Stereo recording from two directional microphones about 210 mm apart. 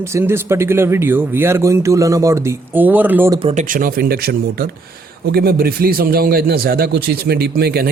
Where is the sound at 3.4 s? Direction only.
30° right (ahead or behind).